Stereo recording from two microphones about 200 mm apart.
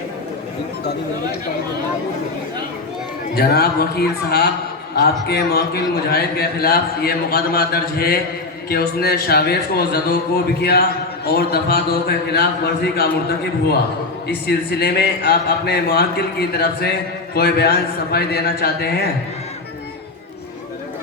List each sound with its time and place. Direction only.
3.3 s speech: 50° left (ahead or behind)
14.3 s speech: 50° left (ahead or behind)